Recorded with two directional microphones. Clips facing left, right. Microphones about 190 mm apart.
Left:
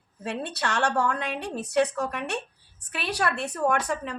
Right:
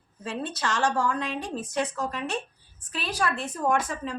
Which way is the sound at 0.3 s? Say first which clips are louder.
Even; 65° left (ahead or behind).